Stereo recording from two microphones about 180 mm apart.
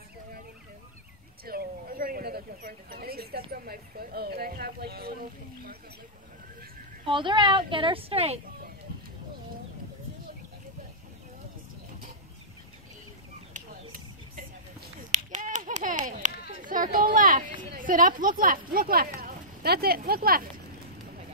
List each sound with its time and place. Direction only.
1.4 s speech: 55° right (ahead or behind)
7.1 s speech: 25° right (ahead or behind)
15.3 s a sound: 45° right (ahead or behind)
17.6 s speech: 50° right (ahead or behind)